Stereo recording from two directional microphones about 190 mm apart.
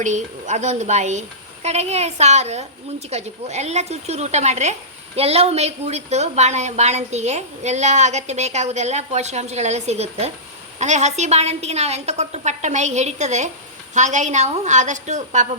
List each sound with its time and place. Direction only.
0.0 s a woman's voice: 40° right (ahead or behind)